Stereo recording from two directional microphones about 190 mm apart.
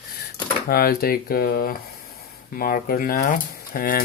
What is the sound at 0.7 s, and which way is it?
Speech, 50° left (ahead or behind).